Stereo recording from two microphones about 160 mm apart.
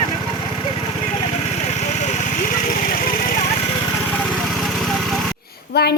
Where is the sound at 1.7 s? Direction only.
45° left (ahead or behind).